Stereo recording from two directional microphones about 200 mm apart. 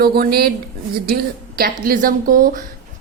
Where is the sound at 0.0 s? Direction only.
50° right (ahead or behind).